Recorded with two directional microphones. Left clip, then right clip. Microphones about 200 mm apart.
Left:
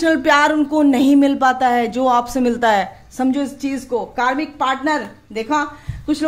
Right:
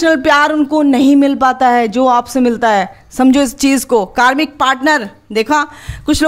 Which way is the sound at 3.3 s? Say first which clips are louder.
Right 11 dB; 45° right (ahead or behind).